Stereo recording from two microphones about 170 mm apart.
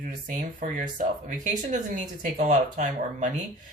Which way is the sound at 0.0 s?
50° right (ahead or behind).